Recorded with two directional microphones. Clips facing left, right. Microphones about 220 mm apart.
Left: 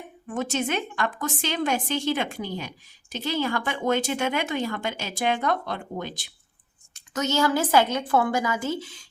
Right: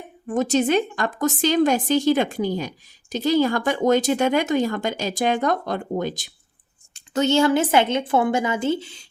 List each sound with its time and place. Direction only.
0.3 s a woman's voice: 35° right (ahead or behind)
6.9 s a woman's voice: 30° right (ahead or behind)